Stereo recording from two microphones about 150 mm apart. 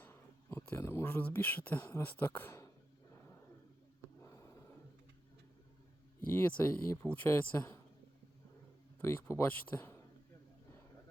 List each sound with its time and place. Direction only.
0.0 s speech: 15° left (ahead or behind)
4.2 s a sound: 20° left (ahead or behind)
6.6 s speech: 15° left (ahead or behind)
9.0 s speech: 15° left (ahead or behind)